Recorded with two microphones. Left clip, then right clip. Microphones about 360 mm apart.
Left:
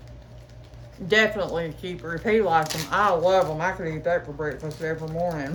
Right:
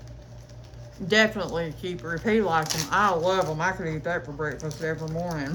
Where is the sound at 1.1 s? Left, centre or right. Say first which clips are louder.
Left 1 dB; centre.